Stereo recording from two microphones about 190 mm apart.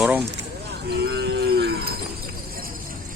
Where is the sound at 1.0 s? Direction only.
60° right (ahead or behind).